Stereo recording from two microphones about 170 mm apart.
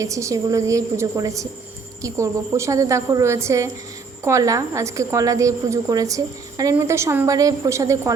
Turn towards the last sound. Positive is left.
turn(degrees=-15)  # may be behind; listen again after turning